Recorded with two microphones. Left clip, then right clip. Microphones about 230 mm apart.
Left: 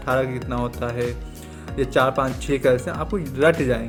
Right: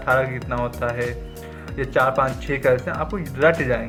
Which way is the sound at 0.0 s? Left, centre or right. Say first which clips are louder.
Right 2 dB; left.